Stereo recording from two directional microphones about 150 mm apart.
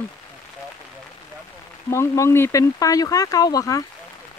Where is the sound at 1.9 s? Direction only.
20° left (ahead or behind).